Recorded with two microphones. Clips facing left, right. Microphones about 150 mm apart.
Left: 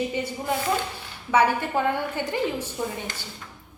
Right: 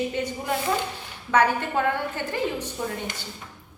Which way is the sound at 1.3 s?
10° left (ahead or behind).